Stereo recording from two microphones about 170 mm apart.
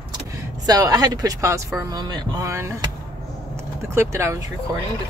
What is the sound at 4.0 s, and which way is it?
Speech, 15° right (ahead or behind).